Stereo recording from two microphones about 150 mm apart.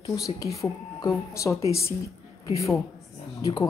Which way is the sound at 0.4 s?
20° left (ahead or behind).